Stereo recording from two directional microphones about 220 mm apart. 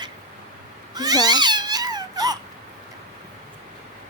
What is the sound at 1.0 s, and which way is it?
Baby cry, 15° right (ahead or behind).